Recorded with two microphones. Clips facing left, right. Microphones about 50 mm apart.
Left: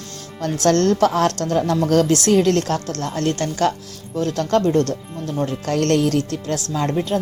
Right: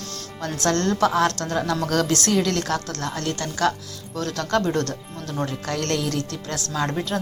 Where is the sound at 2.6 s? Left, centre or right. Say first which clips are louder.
Left 3 dB; right.